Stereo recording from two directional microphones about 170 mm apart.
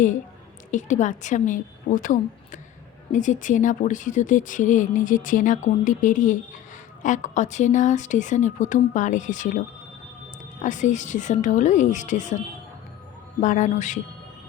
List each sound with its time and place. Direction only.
0.7 s a woman's voice: 45° left (ahead or behind)
10.6 s a woman's voice: 45° left (ahead or behind)
13.4 s a woman's voice: 45° left (ahead or behind)